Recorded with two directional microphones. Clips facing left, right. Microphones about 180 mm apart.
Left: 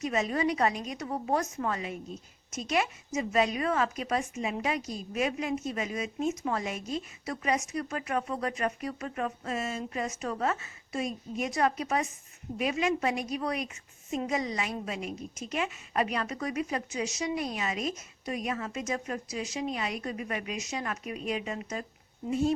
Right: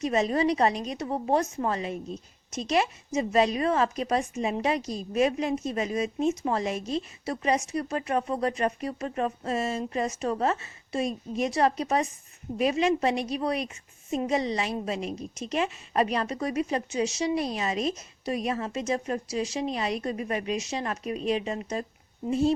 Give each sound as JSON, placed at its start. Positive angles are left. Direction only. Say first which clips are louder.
{"t": 0.0, "sound": "a woman's voice", "louder": "right 4 dB", "side_deg": -35}